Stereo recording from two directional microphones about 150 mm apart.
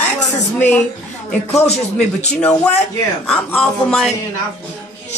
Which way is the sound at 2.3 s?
5° left (ahead or behind).